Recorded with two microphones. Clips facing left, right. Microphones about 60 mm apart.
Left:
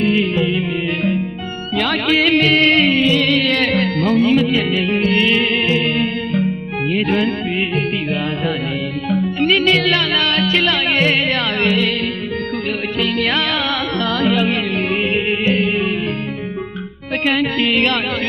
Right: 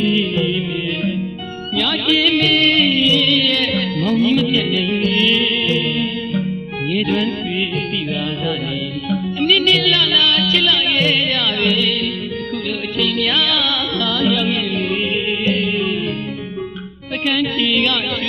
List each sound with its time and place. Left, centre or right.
0.0 s music: left
1.7 s music: left
9.0 s music: left
13.0 s music: left
17.2 s music: left